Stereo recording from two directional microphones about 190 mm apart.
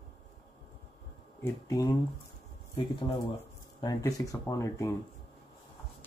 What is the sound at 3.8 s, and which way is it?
Speech, 20° left (ahead or behind).